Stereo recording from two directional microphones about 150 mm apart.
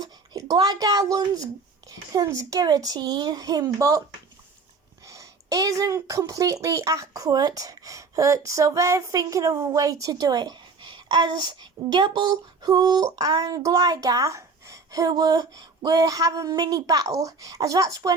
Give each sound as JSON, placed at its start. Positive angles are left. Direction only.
{"t": 0.0, "sound": "speech", "side_deg": -25}
{"t": 5.0, "sound": "speech", "side_deg": -20}